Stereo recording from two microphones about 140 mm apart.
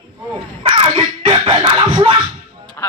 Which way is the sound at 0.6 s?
40° right (ahead or behind).